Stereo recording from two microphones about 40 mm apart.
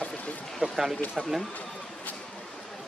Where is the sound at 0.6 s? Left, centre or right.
Right.